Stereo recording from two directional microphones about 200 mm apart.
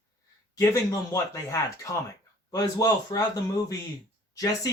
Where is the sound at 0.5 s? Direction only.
15° left (ahead or behind).